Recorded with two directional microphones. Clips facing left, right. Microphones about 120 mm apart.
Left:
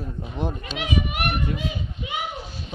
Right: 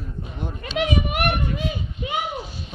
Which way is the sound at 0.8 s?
50° right (ahead or behind).